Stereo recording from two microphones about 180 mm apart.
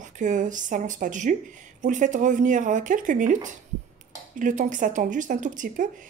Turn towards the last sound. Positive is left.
turn(degrees=-45)  # may be behind; listen again after turning